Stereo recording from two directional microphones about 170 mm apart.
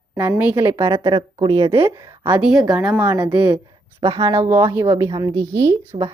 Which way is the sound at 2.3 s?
5° right (ahead or behind).